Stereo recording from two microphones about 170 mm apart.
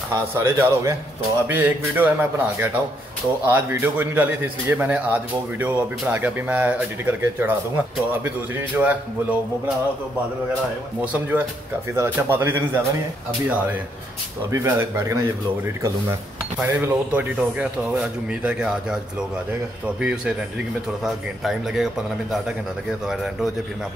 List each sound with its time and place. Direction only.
0.1 s speech: 15° right (ahead or behind)
11.0 s speech: 10° right (ahead or behind)
20.0 s a man's voice: 5° right (ahead or behind)
22.8 s a man's voice: 5° right (ahead or behind)